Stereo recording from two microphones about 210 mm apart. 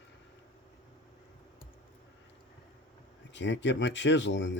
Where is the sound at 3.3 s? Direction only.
60° left (ahead or behind).